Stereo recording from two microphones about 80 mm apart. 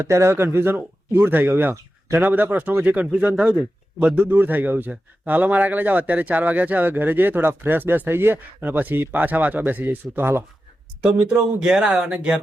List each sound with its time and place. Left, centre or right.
0.0 s a man's voice: right
11.0 s speech: centre